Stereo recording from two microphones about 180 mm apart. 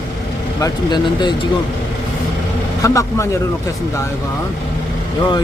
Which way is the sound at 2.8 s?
15° left (ahead or behind).